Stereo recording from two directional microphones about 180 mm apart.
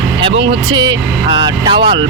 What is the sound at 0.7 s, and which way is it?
Speech, 25° right (ahead or behind).